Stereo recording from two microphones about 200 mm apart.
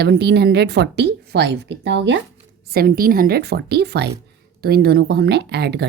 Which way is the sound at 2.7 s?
50° right (ahead or behind).